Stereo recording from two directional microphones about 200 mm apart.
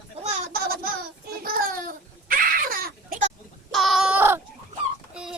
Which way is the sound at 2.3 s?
45° right (ahead or behind).